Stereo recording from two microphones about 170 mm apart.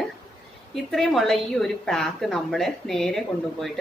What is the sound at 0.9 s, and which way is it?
A woman's voice, centre (ahead or behind).